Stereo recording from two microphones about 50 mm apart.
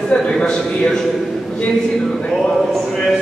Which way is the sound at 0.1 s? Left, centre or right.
Centre.